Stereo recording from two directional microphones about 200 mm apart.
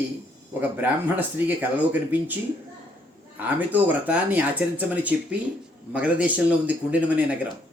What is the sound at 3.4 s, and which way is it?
Speech, 10° right (ahead or behind).